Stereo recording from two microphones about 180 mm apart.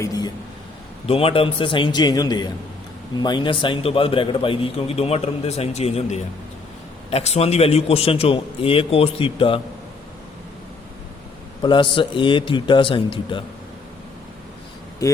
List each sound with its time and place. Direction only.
0.0 s a sound: 20° left (ahead or behind)
1.0 s a man's voice: 30° left (ahead or behind)
11.6 s a man's voice: 25° left (ahead or behind)